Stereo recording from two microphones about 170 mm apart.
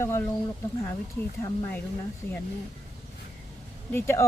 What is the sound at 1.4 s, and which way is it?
Speech, 15° left (ahead or behind).